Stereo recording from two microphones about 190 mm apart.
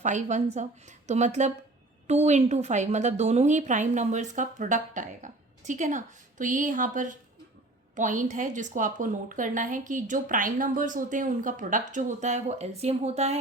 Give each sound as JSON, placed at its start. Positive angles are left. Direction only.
{"t": 0.0, "sound": "a woman's voice", "side_deg": -40}